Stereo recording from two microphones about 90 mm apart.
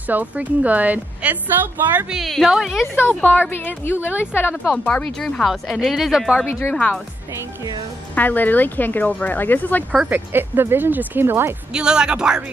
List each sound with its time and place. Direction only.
0.0 s a woman's voice: 20° right (ahead or behind)
2.0 s a woman's voice: centre (ahead or behind)
3.0 s speech: 20° left (ahead or behind); by 6.3 s 5° right (ahead or behind)
6.7 s speech: 15° left (ahead or behind)
8.1 s speech: 20° left (ahead or behind)
10.0 s speech: 20° right (ahead or behind)
11.7 s a woman's voice: 10° right (ahead or behind)